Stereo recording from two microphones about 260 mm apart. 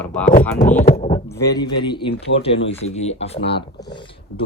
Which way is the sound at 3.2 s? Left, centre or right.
Left.